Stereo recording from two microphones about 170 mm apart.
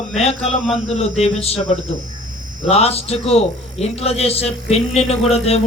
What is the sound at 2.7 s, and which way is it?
A man's voice, 35° left (ahead or behind).